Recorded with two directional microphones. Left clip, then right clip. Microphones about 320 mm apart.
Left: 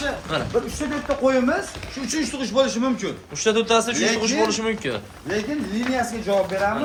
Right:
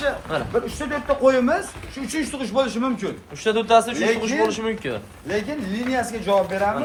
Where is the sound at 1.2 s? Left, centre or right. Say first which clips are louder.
Right 2 dB; right.